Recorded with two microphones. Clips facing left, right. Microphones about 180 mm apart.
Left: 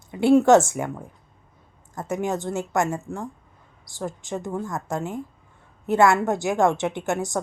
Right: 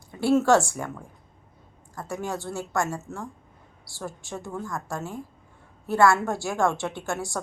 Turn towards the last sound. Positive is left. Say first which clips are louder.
# left 5 dB
turn(degrees=20)  # may be behind; listen again after turning